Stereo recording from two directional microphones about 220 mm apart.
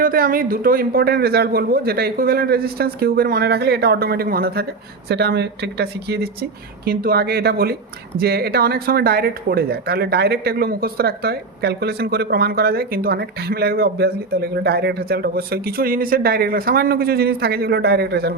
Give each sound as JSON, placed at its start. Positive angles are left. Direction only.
{"t": 0.0, "sound": "speech", "side_deg": -40}